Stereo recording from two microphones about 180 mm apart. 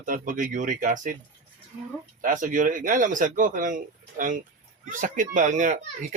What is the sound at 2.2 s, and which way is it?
Speech, 45° right (ahead or behind).